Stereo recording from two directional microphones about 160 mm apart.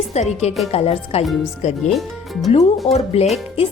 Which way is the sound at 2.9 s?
40° left (ahead or behind).